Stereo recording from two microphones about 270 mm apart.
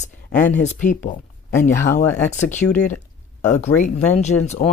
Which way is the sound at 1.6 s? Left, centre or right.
Left.